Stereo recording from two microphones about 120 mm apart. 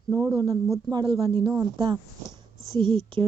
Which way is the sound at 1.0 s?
45° right (ahead or behind).